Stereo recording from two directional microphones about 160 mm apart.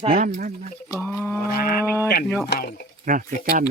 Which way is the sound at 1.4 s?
70° left (ahead or behind).